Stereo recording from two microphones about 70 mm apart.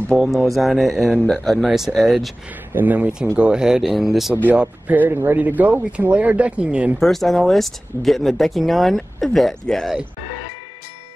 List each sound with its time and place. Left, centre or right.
0.2 s speech: centre
2.7 s speech: right
3.3 s speech: centre
4.6 s speech: right
7.0 s speech: centre